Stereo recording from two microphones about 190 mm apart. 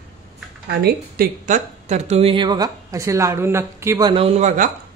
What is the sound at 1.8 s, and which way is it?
Speech, 35° right (ahead or behind).